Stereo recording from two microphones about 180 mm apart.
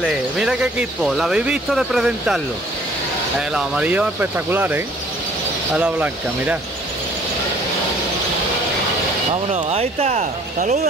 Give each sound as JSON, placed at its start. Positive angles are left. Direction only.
{"t": 0.0, "sound": "speech", "side_deg": -5}
{"t": 9.3, "sound": "speech", "side_deg": -35}